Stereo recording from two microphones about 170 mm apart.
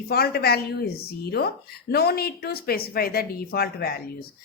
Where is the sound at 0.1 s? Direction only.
70° left (ahead or behind).